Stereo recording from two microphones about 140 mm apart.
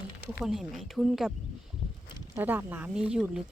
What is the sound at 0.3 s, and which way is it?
Speech, 5° right (ahead or behind).